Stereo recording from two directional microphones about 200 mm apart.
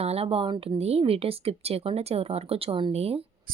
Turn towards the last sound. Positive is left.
turn(degrees=-30)  # may be behind; listen again after turning